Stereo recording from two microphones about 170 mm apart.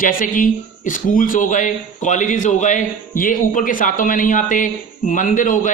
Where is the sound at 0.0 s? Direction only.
55° left (ahead or behind).